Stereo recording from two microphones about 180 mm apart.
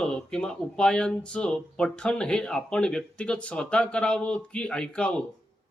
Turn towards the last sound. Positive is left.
turn(degrees=5)  # may be behind; listen again after turning